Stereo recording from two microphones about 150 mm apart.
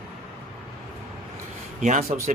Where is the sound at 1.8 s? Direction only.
55° right (ahead or behind).